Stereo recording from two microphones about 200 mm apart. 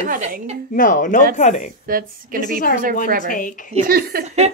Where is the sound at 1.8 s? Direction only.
45° right (ahead or behind).